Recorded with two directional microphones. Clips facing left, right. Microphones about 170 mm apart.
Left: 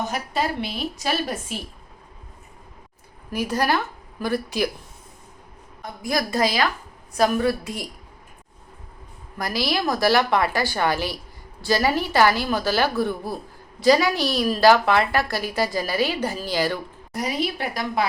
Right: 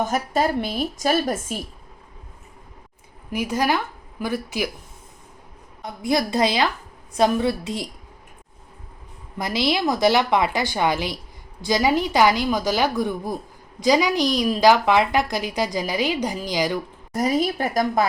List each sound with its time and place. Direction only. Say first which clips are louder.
0.0 s a woman's voice: right 4 dB; 45° right (ahead or behind)
3.2 s speech: right 1 dB; 10° right (ahead or behind)
5.8 s a woman's voice: right 3 dB; 20° right (ahead or behind)
9.4 s a woman's voice: right 2 dB; 20° right (ahead or behind)
17.1 s a woman's voice: right 5 dB; 45° right (ahead or behind)